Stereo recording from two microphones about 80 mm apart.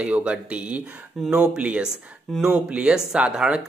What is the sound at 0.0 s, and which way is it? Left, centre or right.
A woman's voice, centre.